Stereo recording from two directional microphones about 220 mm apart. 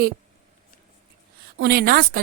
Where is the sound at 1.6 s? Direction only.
45° right (ahead or behind).